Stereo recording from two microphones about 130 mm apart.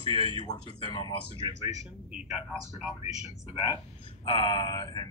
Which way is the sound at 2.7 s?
50° left (ahead or behind).